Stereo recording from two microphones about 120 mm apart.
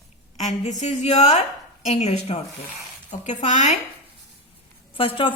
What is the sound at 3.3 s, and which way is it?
Speech, 90° left.